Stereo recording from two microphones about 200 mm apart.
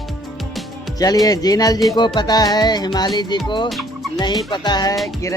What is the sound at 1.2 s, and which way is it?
Speech, 20° left (ahead or behind).